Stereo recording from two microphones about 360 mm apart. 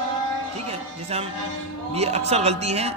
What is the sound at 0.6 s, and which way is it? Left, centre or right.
A man's voice, centre.